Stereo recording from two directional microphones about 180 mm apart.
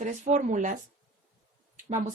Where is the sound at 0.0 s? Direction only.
40° right (ahead or behind).